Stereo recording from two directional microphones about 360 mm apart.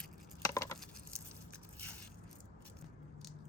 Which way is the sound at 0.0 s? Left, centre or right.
Centre.